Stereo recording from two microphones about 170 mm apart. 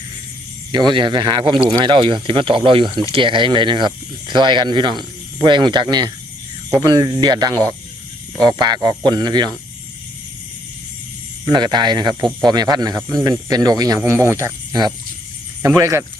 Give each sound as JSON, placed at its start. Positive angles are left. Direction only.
{"t": 0.7, "sound": "speech", "side_deg": -25}
{"t": 11.4, "sound": "speech", "side_deg": -25}